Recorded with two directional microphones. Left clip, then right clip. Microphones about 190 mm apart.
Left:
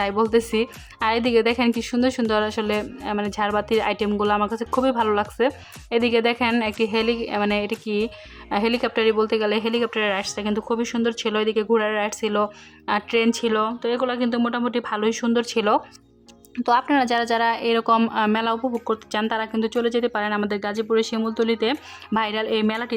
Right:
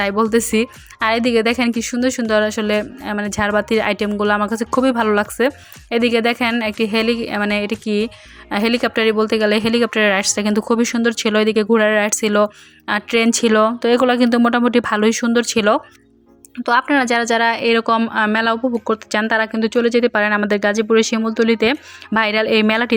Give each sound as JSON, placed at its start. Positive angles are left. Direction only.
{"t": 0.0, "sound": "a woman's voice", "side_deg": -15}